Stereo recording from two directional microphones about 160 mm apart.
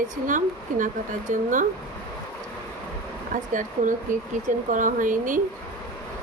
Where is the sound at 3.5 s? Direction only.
55° right (ahead or behind).